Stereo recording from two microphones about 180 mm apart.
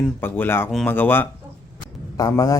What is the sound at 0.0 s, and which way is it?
A man's voice, 10° left (ahead or behind).